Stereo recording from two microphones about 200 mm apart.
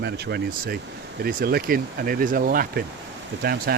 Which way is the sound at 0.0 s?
55° right (ahead or behind).